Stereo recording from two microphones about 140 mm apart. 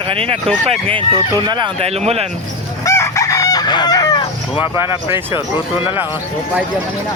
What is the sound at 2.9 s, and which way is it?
Chicken, 20° left (ahead or behind).